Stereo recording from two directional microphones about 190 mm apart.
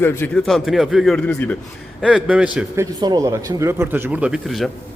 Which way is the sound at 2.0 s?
5° right (ahead or behind).